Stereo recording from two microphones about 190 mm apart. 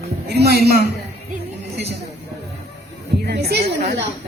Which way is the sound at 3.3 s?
60° right (ahead or behind).